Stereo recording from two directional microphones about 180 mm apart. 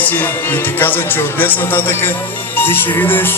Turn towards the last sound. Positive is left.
turn(degrees=10)  # may be behind; listen again after turning